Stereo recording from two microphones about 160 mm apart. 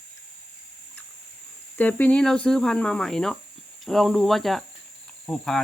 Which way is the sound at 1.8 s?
10° left (ahead or behind).